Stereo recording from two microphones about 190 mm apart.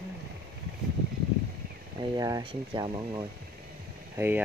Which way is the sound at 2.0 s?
20° right (ahead or behind).